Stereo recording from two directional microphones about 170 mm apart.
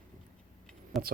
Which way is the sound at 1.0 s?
60° right (ahead or behind).